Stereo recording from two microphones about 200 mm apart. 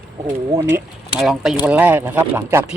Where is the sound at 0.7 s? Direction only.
Centre (ahead or behind).